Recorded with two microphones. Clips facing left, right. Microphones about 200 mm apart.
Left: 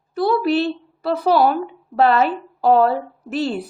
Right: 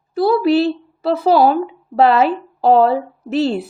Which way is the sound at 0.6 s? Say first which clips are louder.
Right 4 dB; 25° right (ahead or behind).